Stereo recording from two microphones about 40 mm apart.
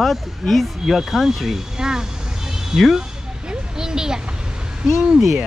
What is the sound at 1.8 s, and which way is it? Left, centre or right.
Speech, centre.